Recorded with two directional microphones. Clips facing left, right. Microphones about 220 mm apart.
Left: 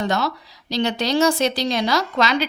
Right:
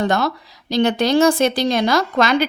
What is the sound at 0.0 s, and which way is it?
A woman's voice, 50° right (ahead or behind).